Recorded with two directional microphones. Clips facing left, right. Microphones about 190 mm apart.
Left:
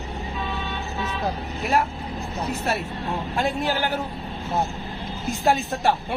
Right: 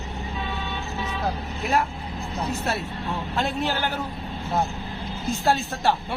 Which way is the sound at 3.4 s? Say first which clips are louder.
Left 2 dB; 10° left (ahead or behind).